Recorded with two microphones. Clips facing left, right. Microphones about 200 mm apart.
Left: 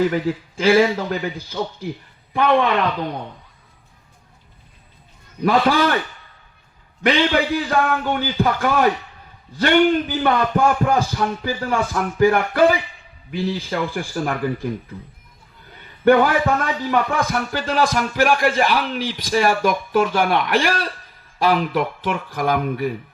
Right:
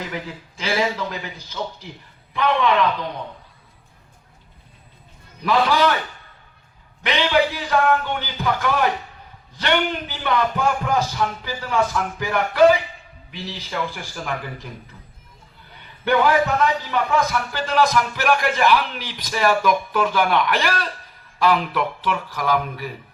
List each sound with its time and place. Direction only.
0.1 s speech: 50° left (ahead or behind)
5.4 s speech: 50° left (ahead or behind)
7.0 s speech: 50° left (ahead or behind)
16.0 s speech: 50° left (ahead or behind)